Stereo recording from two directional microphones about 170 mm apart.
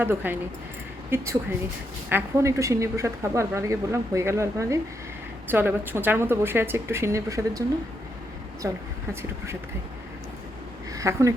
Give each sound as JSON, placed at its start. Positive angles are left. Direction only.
{"t": 0.0, "sound": "speech", "side_deg": -10}
{"t": 10.9, "sound": "speech", "side_deg": -20}